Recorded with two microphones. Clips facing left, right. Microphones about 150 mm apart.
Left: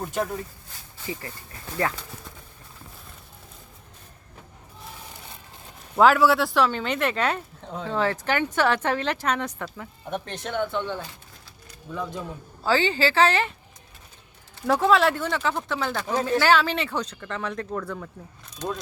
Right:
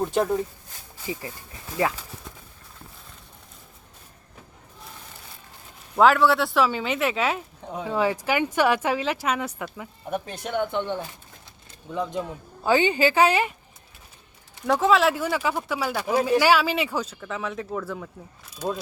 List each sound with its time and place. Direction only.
1.0 s speech: 15° right (ahead or behind)
6.0 s speech: centre (ahead or behind); by 11.0 s 15° right (ahead or behind)
12.6 s speech: 15° right (ahead or behind)
14.7 s speech: centre (ahead or behind)